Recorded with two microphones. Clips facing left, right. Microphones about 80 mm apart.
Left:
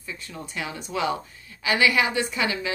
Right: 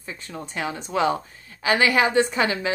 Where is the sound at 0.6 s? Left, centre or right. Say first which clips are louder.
Right 4 dB; right.